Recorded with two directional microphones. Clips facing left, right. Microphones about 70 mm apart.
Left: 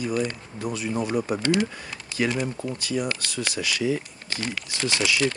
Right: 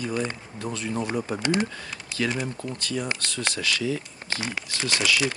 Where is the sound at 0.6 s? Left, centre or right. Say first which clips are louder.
Left 2 dB; centre.